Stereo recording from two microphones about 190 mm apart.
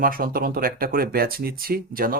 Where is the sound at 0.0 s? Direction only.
50° right (ahead or behind).